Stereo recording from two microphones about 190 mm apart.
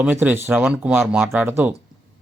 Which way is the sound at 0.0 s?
10° right (ahead or behind).